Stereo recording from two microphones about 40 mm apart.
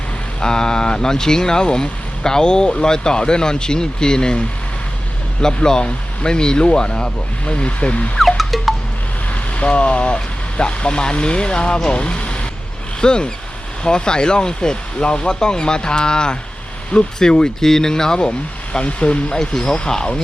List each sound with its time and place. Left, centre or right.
0.4 s speech: centre
5.6 s speech: centre
8.4 s music: centre
9.3 s speech: left